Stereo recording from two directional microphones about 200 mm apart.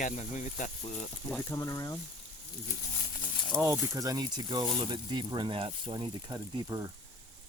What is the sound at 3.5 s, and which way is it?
Speech, 10° right (ahead or behind).